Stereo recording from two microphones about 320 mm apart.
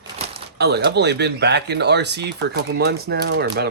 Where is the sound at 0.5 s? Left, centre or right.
Right.